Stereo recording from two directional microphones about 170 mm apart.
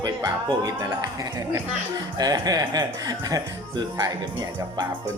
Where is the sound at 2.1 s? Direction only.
20° right (ahead or behind).